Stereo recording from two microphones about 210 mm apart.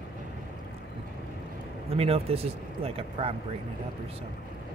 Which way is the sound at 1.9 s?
30° right (ahead or behind).